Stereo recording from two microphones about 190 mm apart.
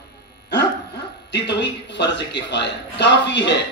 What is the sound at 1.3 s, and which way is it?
Speech, 65° left (ahead or behind).